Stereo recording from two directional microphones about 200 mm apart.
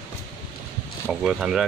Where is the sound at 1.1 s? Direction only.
5° right (ahead or behind).